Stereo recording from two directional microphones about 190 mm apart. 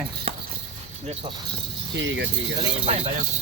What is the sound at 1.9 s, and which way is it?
Speech, 70° right (ahead or behind).